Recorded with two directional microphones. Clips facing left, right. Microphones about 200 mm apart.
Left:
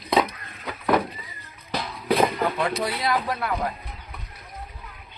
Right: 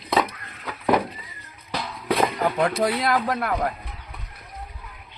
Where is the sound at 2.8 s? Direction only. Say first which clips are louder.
Right 3 dB; 50° right (ahead or behind).